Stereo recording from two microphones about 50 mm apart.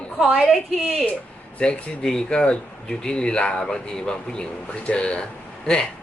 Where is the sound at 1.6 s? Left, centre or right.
Centre.